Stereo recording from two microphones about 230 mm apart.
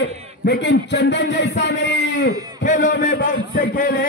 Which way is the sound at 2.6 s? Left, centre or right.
Left.